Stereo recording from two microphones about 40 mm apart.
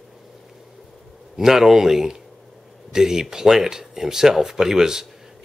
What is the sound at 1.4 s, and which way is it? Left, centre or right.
Speech, centre.